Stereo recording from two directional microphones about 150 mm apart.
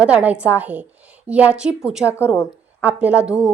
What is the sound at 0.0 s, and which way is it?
A woman's voice, 10° right (ahead or behind).